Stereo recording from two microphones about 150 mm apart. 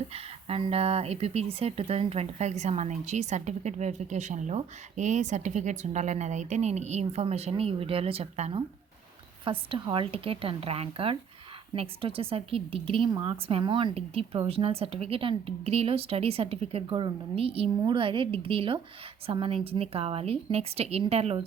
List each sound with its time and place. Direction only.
0.1 s speech: 40° right (ahead or behind)